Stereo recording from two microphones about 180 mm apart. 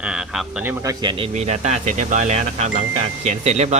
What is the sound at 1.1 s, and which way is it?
Speech, 35° right (ahead or behind).